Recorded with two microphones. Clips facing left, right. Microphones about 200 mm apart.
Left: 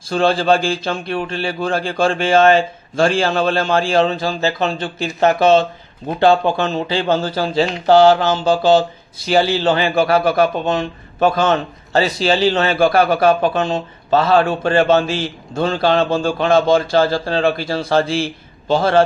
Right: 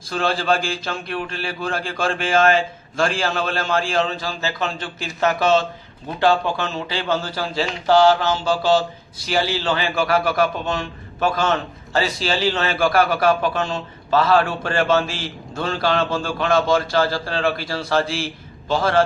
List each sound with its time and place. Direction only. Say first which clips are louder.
0.1 s speech: left 6 dB; 30° left (ahead or behind)
9.3 s speech: left 6 dB; 25° left (ahead or behind)